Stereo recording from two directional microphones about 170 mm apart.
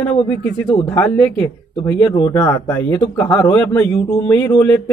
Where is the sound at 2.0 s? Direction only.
25° left (ahead or behind).